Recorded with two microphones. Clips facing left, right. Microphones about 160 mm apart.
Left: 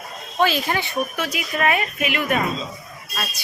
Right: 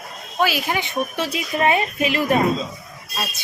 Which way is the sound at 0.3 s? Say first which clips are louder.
Left 1 dB; 10° right (ahead or behind).